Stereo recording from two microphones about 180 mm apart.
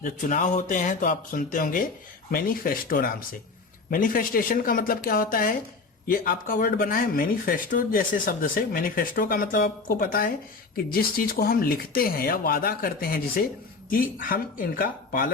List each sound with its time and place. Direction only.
0.0 s speech: 45° left (ahead or behind)